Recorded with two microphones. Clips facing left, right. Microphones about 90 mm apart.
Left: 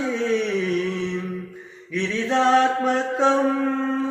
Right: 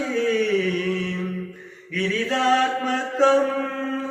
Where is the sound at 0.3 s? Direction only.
20° left (ahead or behind).